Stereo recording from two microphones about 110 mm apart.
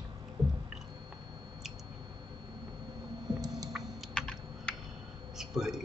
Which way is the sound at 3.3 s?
30° right (ahead or behind).